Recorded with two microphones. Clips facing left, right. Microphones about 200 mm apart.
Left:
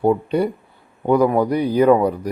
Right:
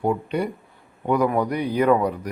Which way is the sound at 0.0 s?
35° left (ahead or behind).